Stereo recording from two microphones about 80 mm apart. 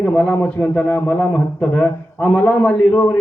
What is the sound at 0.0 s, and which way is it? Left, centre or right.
A man's voice, centre.